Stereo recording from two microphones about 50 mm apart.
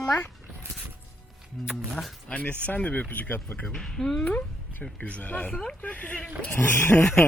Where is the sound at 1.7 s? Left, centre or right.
Centre.